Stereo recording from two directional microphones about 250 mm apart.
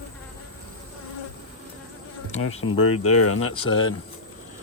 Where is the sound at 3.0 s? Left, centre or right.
Left.